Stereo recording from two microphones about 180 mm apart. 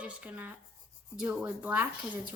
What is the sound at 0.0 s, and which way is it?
Speech, 10° right (ahead or behind).